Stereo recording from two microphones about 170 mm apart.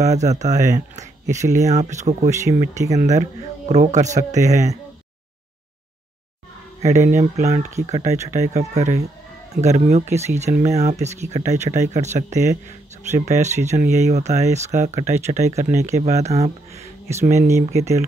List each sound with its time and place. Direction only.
0.0 s speech: 40° right (ahead or behind)
6.8 s speech: 40° right (ahead or behind)